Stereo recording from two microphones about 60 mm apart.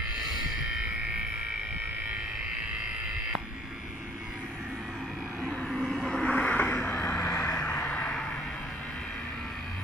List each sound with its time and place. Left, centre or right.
5.7 s vehicle: centre
6.3 s vehicle: left
7.2 s vehicle: left